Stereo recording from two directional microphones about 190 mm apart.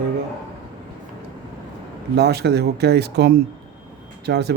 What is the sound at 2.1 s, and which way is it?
Speech, 60° right (ahead or behind).